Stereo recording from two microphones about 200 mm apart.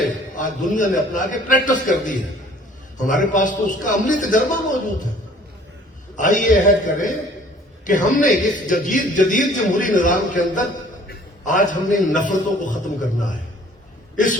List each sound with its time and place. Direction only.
0.1 s a man's voice: 40° left (ahead or behind)
6.1 s a man's voice: 40° left (ahead or behind)